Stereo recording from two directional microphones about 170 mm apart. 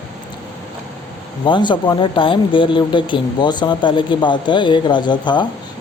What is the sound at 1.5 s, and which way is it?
Speech, 30° left (ahead or behind).